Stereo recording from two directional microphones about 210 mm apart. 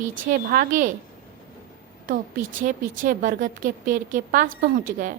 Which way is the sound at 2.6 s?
40° right (ahead or behind).